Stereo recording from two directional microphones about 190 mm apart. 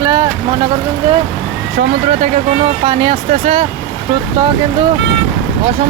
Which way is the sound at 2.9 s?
25° right (ahead or behind).